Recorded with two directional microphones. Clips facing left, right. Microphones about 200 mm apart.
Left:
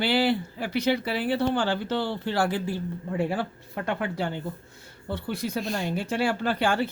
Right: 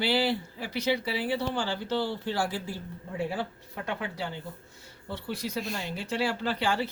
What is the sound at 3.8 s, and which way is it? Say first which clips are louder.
Speech: left 5 dB; 55° left (ahead or behind).